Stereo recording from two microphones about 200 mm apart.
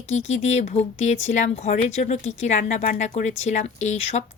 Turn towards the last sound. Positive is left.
turn(degrees=35)  # may be behind; listen again after turning